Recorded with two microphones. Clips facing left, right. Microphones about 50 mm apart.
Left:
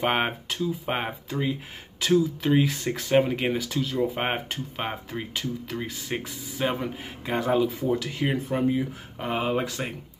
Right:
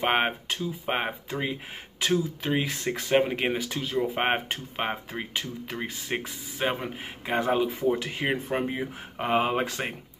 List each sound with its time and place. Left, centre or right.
0.0 s speech: centre
2.6 s speech: centre; by 9.9 s right